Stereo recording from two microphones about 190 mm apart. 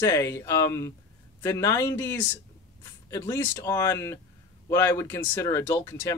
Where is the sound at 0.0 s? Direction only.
15° left (ahead or behind).